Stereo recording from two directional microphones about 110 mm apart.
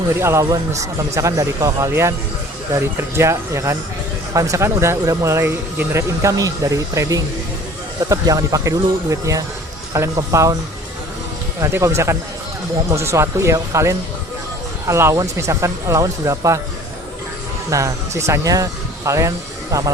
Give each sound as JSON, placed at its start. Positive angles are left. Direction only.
{"t": 0.2, "sound": "speech", "side_deg": -25}
{"t": 3.2, "sound": "speech", "side_deg": -25}
{"t": 11.6, "sound": "speech", "side_deg": -25}
{"t": 17.7, "sound": "speech", "side_deg": -30}